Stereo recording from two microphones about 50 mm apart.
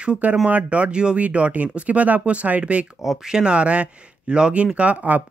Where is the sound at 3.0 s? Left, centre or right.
Centre.